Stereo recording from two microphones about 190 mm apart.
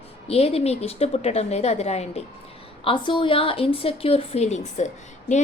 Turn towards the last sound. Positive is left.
turn(degrees=40)  # may be behind; listen again after turning